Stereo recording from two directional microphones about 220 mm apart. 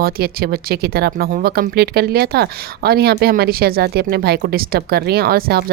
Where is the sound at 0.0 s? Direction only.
45° right (ahead or behind).